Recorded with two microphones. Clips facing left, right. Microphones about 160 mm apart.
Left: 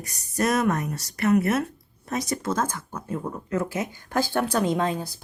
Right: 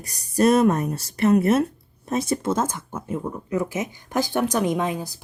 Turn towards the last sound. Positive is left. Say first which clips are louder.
# right 1 dB
turn(degrees=-15)  # may be behind; listen again after turning